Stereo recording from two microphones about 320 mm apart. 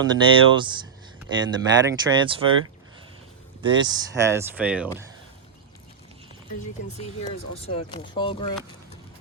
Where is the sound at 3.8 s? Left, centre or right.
Centre.